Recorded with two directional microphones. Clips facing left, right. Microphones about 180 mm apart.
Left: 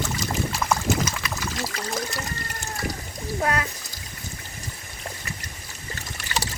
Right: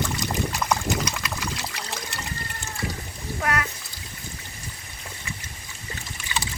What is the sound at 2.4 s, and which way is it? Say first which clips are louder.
Water: left 2 dB; 45° left (ahead or behind).